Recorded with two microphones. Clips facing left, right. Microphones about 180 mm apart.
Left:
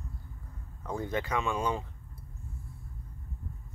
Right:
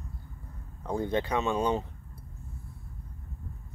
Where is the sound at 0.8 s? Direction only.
30° right (ahead or behind).